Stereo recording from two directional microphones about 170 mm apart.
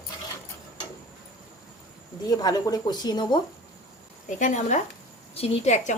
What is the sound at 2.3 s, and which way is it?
A woman's voice, 20° left (ahead or behind).